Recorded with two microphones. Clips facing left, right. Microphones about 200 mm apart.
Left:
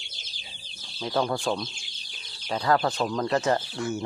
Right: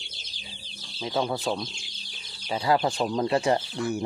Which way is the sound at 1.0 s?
5° right (ahead or behind).